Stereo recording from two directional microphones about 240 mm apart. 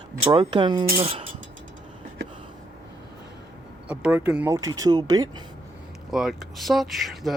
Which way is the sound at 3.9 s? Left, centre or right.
Centre.